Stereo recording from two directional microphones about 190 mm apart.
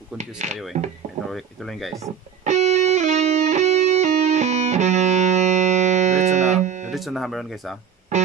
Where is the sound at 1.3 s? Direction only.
Centre (ahead or behind).